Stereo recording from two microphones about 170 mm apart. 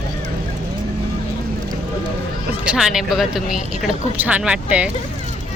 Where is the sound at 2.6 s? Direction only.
5° right (ahead or behind).